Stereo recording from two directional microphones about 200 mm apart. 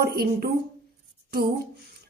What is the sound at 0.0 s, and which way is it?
Speech, 50° right (ahead or behind).